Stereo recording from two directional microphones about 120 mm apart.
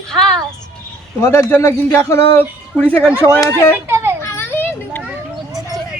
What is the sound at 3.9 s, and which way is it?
Children playing, 20° right (ahead or behind).